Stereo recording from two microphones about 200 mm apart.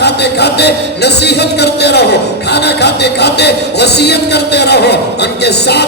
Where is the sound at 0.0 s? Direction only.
55° left (ahead or behind).